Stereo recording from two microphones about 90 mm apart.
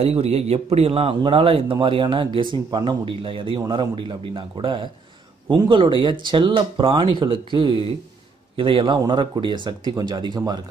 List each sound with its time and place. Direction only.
0.1 s a man's voice: 90° right; by 10.6 s 50° right (ahead or behind)